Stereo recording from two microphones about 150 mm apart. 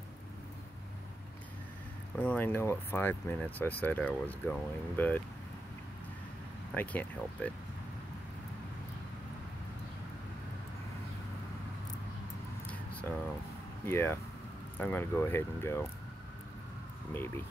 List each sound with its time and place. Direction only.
2.1 s speech: 10° left (ahead or behind)
6.7 s speech: 10° left (ahead or behind)
13.8 s speech: 15° left (ahead or behind)
17.1 s speech: 15° left (ahead or behind)